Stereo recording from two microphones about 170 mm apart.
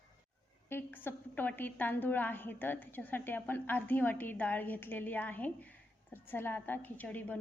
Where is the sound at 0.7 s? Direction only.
10° left (ahead or behind).